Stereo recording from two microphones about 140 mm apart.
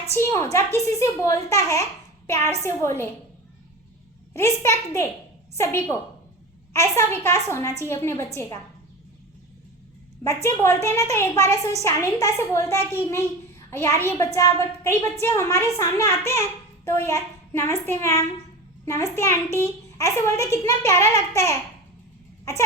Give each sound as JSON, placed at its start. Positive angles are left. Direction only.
{"t": 0.1, "sound": "a woman's voice", "side_deg": 20}
{"t": 4.4, "sound": "a woman's voice", "side_deg": 20}
{"t": 10.2, "sound": "a woman's voice", "side_deg": 20}